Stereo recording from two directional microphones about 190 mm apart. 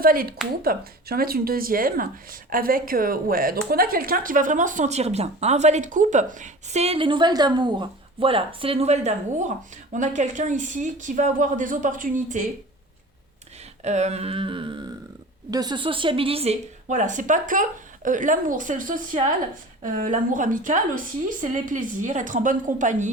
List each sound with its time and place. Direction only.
0.0 s a woman's voice: 50° right (ahead or behind)
13.8 s humming: 35° right (ahead or behind)
15.4 s a woman's voice: 20° right (ahead or behind); by 23.1 s 40° right (ahead or behind)